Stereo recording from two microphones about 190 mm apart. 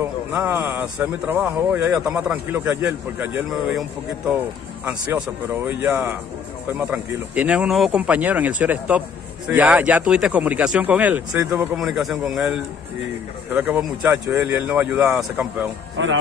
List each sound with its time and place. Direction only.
0.0 s speech: 10° right (ahead or behind)
4.8 s speech: 10° right (ahead or behind)
16.0 s speech: 85° right